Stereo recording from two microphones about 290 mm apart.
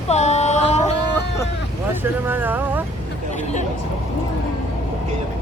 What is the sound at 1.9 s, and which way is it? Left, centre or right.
Speech, centre.